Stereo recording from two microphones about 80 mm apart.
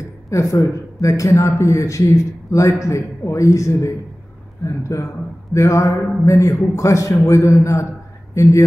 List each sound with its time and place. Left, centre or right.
0.3 s a man's voice: left